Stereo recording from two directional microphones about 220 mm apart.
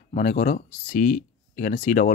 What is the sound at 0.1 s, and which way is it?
Speech, 35° left (ahead or behind).